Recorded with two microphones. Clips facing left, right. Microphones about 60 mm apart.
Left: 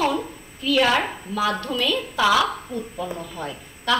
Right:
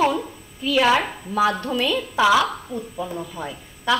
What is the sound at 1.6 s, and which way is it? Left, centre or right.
Speech, right.